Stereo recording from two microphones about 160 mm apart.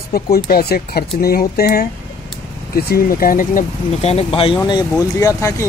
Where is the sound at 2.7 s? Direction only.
65° left (ahead or behind).